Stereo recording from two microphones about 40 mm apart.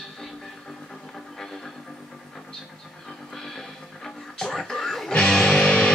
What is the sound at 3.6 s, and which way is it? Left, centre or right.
Music, centre.